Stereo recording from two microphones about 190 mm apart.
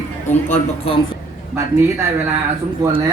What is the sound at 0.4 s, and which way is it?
Speech, 40° left (ahead or behind).